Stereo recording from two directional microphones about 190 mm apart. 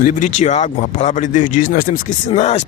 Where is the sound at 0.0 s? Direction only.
45° left (ahead or behind).